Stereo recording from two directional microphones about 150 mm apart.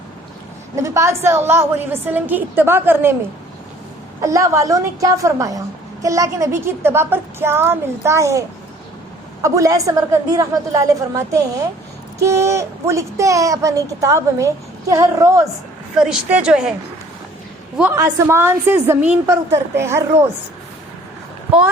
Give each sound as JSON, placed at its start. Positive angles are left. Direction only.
{"t": 0.8, "sound": "a woman's voice", "side_deg": -20}
{"t": 4.2, "sound": "a woman's voice", "side_deg": -20}
{"t": 16.0, "sound": "a woman's voice", "side_deg": -5}
{"t": 17.9, "sound": "a woman's voice", "side_deg": -20}